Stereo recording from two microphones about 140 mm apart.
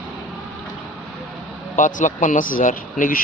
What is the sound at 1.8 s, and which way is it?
Speech, 65° left (ahead or behind).